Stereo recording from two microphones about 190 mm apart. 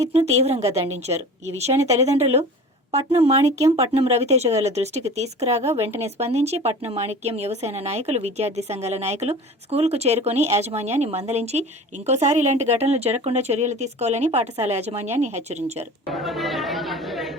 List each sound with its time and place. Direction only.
0.0 s speech: 35° right (ahead or behind)
16.2 s chatter: centre (ahead or behind)